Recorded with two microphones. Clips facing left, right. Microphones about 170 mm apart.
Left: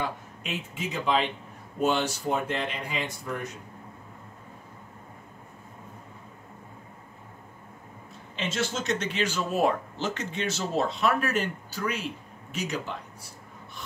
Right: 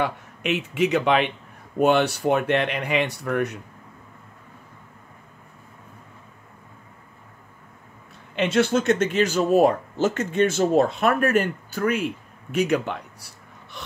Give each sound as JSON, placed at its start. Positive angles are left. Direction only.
{"t": 0.0, "sound": "speech", "side_deg": -70}
{"t": 8.4, "sound": "speech", "side_deg": -65}